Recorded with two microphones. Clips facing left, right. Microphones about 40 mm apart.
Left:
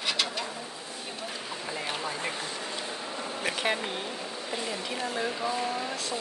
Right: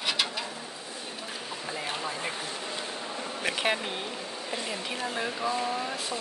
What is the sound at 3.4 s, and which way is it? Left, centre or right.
Speech, centre.